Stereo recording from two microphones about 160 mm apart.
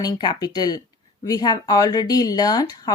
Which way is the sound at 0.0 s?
25° left (ahead or behind).